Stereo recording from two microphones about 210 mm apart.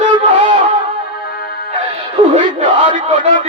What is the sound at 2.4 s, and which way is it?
Crowd, 30° right (ahead or behind).